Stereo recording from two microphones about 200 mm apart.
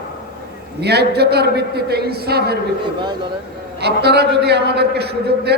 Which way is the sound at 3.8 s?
55° right (ahead or behind).